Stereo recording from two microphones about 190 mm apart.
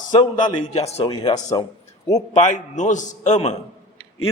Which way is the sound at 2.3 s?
40° left (ahead or behind).